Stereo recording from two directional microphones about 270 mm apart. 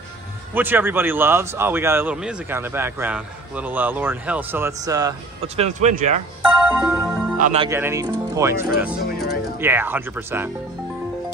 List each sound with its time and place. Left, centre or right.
0.6 s a man's voice: centre
5.6 s speech: right
6.7 s music: centre
7.3 s speech: right
7.6 s a man's voice: centre